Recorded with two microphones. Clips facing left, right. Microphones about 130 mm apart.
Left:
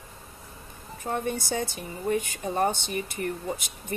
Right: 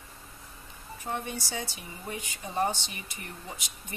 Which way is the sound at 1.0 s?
50° left (ahead or behind).